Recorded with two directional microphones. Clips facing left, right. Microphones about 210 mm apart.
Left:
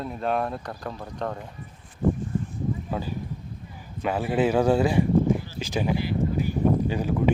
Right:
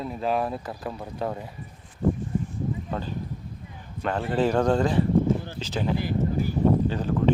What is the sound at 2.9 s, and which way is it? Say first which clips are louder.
Speech: left 1 dB; 10° left (ahead or behind).